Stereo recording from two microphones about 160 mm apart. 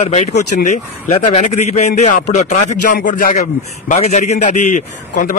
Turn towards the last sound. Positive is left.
turn(degrees=55)  # may be behind; listen again after turning